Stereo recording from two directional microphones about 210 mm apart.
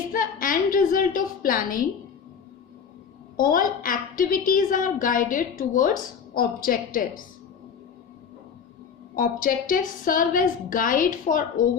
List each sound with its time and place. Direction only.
0.1 s a sound: 40° left (ahead or behind)
3.3 s a woman's voice: 40° left (ahead or behind)
9.1 s a woman's voice: 40° left (ahead or behind)